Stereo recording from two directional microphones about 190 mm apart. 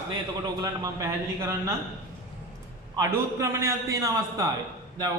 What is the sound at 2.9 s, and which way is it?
A man's voice, 15° right (ahead or behind).